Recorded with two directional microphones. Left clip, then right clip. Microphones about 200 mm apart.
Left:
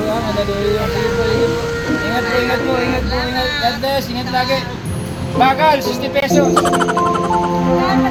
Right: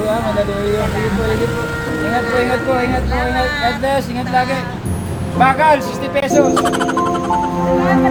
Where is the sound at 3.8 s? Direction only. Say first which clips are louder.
Right 1 dB; 5° left (ahead or behind).